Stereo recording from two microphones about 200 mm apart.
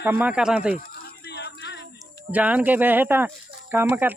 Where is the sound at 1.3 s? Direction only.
60° left (ahead or behind).